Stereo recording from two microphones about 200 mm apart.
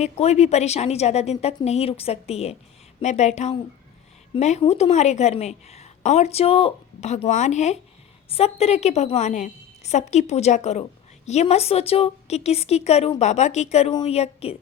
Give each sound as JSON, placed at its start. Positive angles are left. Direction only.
{"t": 0.0, "sound": "a woman's voice", "side_deg": 35}